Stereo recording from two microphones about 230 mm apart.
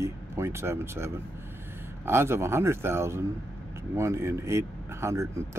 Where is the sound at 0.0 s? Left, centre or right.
Centre.